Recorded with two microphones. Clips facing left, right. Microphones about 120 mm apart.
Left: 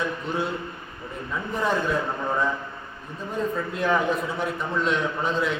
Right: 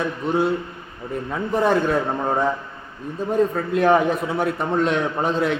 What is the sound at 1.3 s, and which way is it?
A man's voice, 55° right (ahead or behind).